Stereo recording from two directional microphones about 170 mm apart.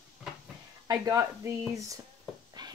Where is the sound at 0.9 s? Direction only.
20° right (ahead or behind).